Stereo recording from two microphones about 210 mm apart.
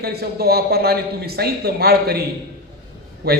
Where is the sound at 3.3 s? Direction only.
45° right (ahead or behind).